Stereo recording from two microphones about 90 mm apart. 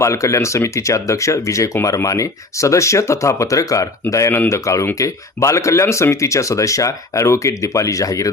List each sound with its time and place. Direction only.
0.0 s speech: 35° left (ahead or behind)